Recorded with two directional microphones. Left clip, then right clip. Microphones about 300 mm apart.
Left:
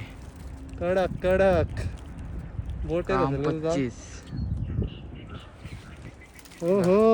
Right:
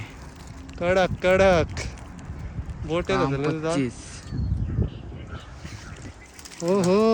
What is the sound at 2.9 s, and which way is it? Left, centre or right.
Speech, centre.